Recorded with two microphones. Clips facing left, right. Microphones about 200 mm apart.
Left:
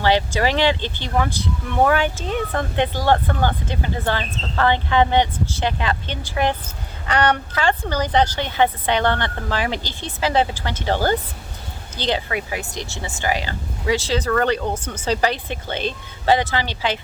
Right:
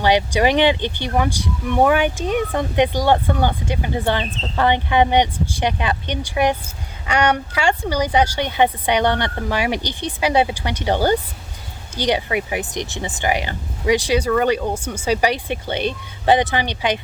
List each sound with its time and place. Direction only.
0.0 s speech: 15° right (ahead or behind)